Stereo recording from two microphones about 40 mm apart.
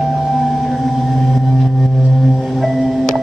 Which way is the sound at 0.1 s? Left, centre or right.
Centre.